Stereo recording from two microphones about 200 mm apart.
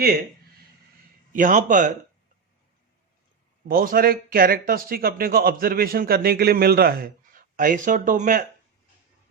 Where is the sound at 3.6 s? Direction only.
45° right (ahead or behind).